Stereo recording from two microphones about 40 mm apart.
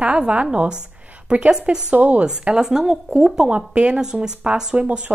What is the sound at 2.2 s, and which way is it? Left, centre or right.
Speech, right.